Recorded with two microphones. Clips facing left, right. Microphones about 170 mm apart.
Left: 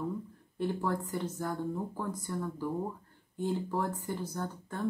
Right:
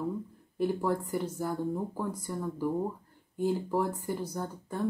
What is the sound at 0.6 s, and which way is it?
Speech, 10° right (ahead or behind).